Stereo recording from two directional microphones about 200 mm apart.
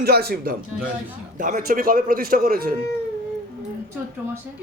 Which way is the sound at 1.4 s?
40° right (ahead or behind).